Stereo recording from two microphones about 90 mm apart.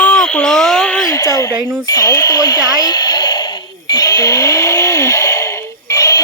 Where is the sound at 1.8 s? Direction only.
45° left (ahead or behind).